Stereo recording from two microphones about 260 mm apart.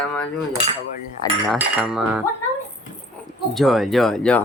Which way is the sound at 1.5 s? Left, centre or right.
Centre.